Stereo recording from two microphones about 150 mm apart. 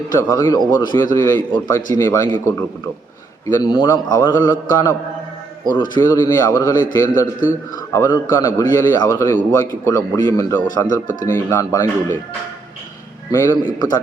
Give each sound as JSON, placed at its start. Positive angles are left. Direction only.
{"t": 0.2, "sound": "a man's voice", "side_deg": 25}
{"t": 13.3, "sound": "a man's voice", "side_deg": 20}
{"t": 13.6, "sound": "a man's voice", "side_deg": 30}